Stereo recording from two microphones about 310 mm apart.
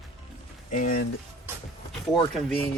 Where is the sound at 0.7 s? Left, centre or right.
Left.